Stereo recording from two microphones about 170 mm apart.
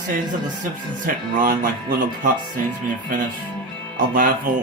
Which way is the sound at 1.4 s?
55° right (ahead or behind).